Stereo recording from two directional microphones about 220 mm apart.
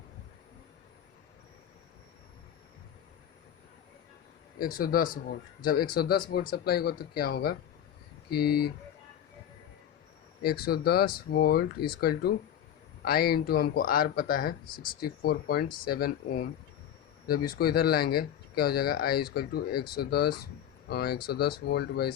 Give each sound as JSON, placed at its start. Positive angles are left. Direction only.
{"t": 4.6, "sound": "speech", "side_deg": 40}
{"t": 10.4, "sound": "speech", "side_deg": 45}